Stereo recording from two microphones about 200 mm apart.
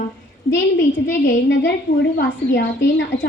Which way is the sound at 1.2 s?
60° left (ahead or behind).